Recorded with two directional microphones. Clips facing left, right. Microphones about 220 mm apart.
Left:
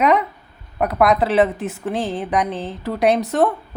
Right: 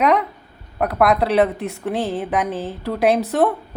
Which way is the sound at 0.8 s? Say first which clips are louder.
Left 1 dB; centre (ahead or behind).